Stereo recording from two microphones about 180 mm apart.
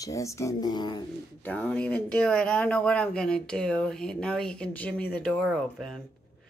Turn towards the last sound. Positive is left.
turn(degrees=0)  # may be behind; listen again after turning